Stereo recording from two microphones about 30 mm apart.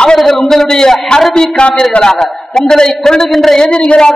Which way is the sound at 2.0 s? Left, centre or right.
Left.